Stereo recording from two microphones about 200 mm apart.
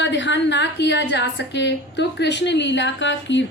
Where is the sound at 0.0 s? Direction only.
65° left (ahead or behind).